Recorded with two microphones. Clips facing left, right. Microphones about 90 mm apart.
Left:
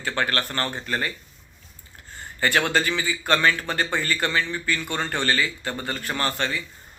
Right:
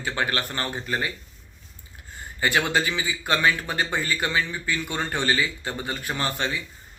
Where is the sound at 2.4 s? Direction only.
15° right (ahead or behind).